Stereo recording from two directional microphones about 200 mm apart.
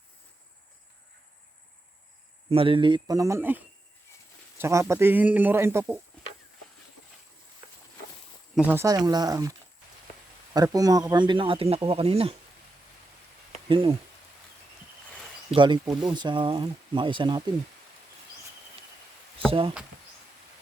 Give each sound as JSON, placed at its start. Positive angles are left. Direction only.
{"t": 2.5, "sound": "a man's voice", "side_deg": -25}
{"t": 8.5, "sound": "a man's voice", "side_deg": -10}
{"t": 13.7, "sound": "speech", "side_deg": -25}
{"t": 15.5, "sound": "speech", "side_deg": -25}
{"t": 19.5, "sound": "speech", "side_deg": -25}